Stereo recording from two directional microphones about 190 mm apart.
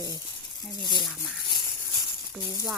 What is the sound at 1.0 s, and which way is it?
Speech, centre (ahead or behind).